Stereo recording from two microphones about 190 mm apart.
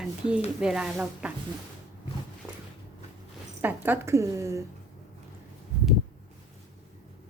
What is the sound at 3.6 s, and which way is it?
A woman's voice, 10° right (ahead or behind).